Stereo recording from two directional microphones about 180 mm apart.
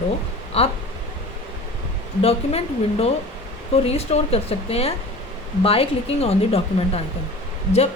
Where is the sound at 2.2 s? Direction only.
35° left (ahead or behind).